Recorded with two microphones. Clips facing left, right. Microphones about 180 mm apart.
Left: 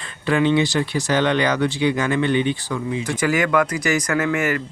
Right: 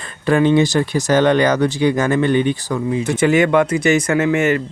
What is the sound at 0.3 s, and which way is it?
Speech, 45° right (ahead or behind).